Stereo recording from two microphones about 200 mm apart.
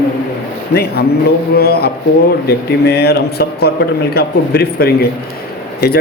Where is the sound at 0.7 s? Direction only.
50° left (ahead or behind).